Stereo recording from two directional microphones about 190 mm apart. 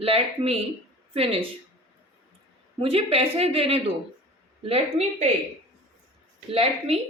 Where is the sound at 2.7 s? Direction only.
30° right (ahead or behind).